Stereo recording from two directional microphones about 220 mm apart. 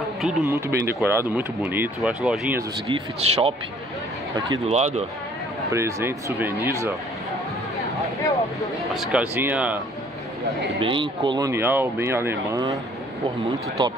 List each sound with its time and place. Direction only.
0.5 s speech: 10° right (ahead or behind)
2.9 s speech: 25° right (ahead or behind)
5.7 s speech: 15° right (ahead or behind)
7.7 s a sound: 15° left (ahead or behind)
8.8 s speech: centre (ahead or behind)
10.8 s speech: 20° right (ahead or behind)